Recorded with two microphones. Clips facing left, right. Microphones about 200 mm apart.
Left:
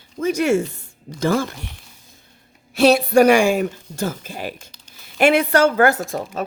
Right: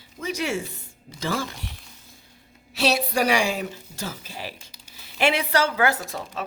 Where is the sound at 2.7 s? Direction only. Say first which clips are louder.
Left 10 dB; 50° left (ahead or behind).